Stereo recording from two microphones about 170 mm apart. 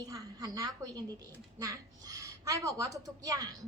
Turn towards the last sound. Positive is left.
turn(degrees=-20)  # may be behind; listen again after turning